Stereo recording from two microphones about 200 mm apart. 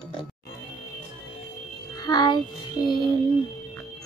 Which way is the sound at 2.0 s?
20° left (ahead or behind).